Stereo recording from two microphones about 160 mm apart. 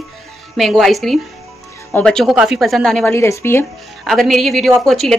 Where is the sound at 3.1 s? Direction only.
15° left (ahead or behind).